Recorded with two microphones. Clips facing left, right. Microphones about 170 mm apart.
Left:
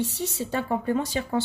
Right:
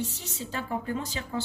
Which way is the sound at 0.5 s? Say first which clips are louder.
Left 6 dB; 55° left (ahead or behind).